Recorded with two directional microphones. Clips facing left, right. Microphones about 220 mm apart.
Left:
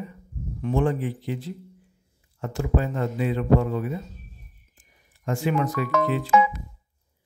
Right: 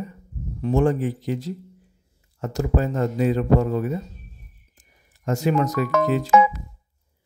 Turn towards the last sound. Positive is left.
turn(degrees=-45)  # may be behind; listen again after turning